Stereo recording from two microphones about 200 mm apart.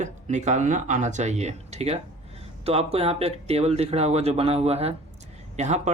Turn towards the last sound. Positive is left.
turn(degrees=-35)  # may be behind; listen again after turning